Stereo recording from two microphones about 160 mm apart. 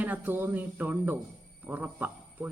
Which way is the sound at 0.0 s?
10° right (ahead or behind).